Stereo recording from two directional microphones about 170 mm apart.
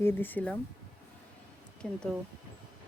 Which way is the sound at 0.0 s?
10° left (ahead or behind).